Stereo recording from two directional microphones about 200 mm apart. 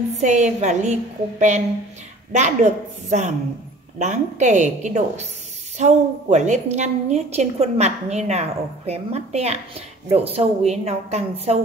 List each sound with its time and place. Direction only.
0.2 s a woman's voice: 35° right (ahead or behind)
2.3 s a woman's voice: 35° right (ahead or behind)